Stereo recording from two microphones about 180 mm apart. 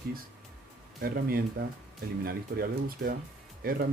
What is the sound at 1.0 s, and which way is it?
Speech, 55° right (ahead or behind).